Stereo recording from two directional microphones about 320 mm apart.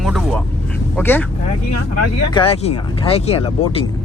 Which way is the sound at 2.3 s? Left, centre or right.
Centre.